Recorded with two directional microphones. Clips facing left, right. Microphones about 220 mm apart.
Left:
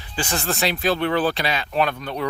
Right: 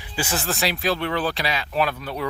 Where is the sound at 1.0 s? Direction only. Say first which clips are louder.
Left 4 dB; 35° left (ahead or behind).